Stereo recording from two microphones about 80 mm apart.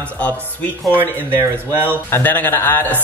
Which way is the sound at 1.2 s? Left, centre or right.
Right.